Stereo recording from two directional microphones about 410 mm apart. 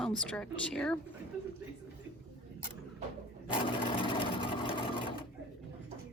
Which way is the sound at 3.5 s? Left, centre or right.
Centre.